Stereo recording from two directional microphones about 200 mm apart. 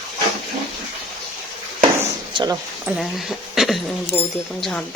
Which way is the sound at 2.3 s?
20° right (ahead or behind).